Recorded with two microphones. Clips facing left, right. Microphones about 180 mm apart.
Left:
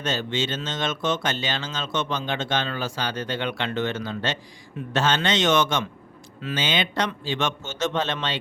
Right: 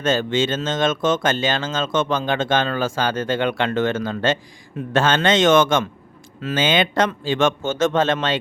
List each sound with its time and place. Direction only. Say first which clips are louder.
0.0 s speech: right 7 dB; 50° right (ahead or behind)